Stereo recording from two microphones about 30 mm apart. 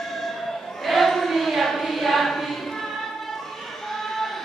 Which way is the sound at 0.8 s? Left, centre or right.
Centre.